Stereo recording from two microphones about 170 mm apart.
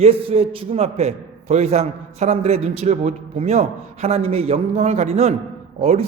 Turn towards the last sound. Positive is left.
turn(degrees=-40)  # may be behind; listen again after turning